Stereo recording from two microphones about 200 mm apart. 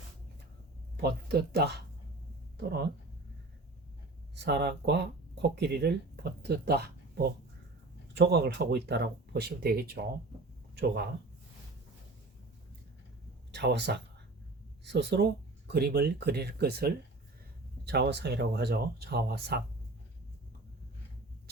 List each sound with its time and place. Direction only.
1.0 s speech: 50° right (ahead or behind)
4.4 s speech: 60° right (ahead or behind)
13.5 s speech: 60° right (ahead or behind)